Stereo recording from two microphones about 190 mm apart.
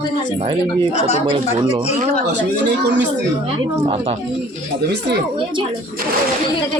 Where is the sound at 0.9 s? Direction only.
35° left (ahead or behind).